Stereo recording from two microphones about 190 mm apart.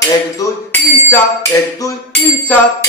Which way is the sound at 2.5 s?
10° left (ahead or behind).